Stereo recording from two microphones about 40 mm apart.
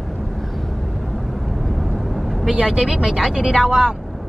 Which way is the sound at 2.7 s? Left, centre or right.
Centre.